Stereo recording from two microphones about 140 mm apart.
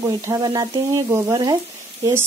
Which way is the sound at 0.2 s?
25° right (ahead or behind).